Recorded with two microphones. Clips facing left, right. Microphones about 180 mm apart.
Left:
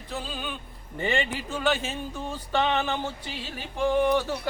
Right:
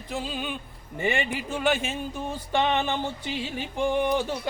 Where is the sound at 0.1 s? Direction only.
15° right (ahead or behind).